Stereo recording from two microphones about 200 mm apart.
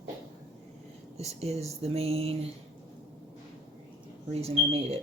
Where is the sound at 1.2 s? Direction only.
30° right (ahead or behind).